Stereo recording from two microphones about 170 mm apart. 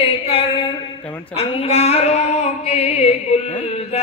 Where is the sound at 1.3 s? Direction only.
35° left (ahead or behind).